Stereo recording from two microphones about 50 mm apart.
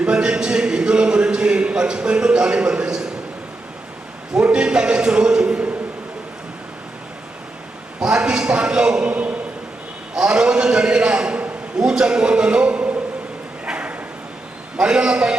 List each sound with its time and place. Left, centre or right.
0.0 s a man's voice: centre
4.5 s a man's voice: centre
7.9 s a man's voice: centre
13.7 s bow-wow: right
14.8 s a man's voice: centre